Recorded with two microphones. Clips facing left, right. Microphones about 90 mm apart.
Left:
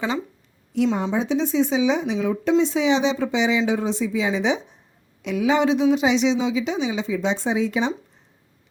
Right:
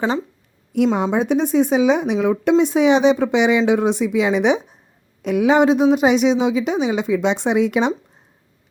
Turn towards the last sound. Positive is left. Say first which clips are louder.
# right 5 dB
turn(degrees=-65)  # may be behind; listen again after turning